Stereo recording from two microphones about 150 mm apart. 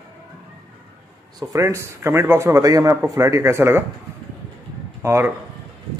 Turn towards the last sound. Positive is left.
turn(degrees=-15)  # may be behind; listen again after turning